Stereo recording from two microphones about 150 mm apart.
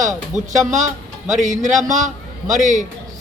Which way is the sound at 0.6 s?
55° right (ahead or behind).